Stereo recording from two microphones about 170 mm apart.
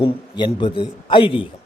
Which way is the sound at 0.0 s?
30° left (ahead or behind).